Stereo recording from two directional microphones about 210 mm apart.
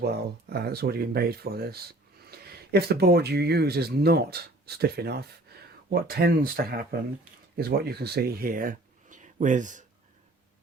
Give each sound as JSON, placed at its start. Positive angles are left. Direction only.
{"t": 0.0, "sound": "speech", "side_deg": -50}